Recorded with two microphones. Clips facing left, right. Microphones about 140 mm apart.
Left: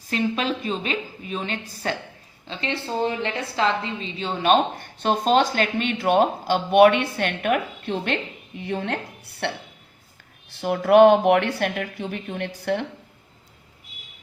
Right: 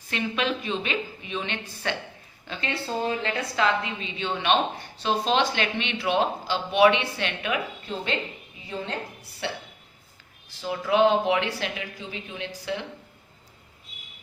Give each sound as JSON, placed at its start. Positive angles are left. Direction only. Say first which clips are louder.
{"t": 0.1, "sound": "a woman's voice", "louder": "left 3 dB", "side_deg": 35}
{"t": 2.5, "sound": "a woman's voice", "louder": "left 2 dB", "side_deg": 25}